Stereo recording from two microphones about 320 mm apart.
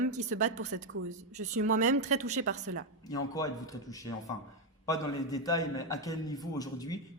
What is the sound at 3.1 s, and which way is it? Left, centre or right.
A man's voice, centre.